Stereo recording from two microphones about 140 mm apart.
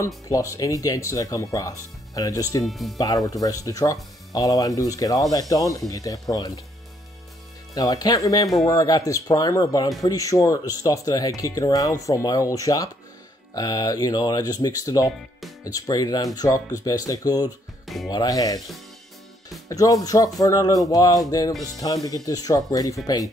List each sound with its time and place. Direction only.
0.0 s speech: 25° left (ahead or behind)
2.6 s speech: centre (ahead or behind)
3.0 s speech: 25° left (ahead or behind)
7.7 s speech: 25° left (ahead or behind)
17.8 s music: centre (ahead or behind)
18.1 s speech: 25° left (ahead or behind)
19.7 s speech: 25° left (ahead or behind)